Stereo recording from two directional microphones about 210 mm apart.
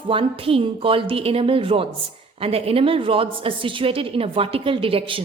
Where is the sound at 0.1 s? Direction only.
25° right (ahead or behind).